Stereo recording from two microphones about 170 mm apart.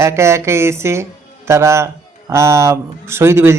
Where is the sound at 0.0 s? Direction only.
15° right (ahead or behind).